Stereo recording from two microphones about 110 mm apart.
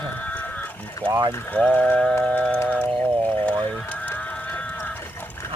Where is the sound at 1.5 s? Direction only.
10° left (ahead or behind).